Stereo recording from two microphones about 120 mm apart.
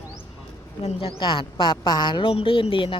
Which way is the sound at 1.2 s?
45° left (ahead or behind).